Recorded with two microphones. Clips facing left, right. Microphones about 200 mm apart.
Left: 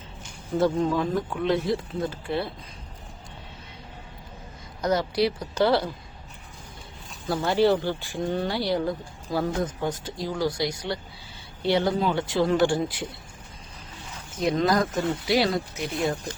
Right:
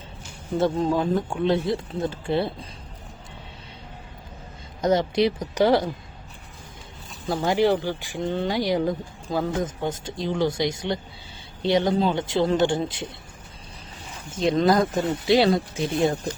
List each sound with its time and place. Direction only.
0.6 s speech: 30° right (ahead or behind)
4.8 s speech: 25° right (ahead or behind)
7.3 s speech: 15° right (ahead or behind)
14.3 s speech: 25° right (ahead or behind)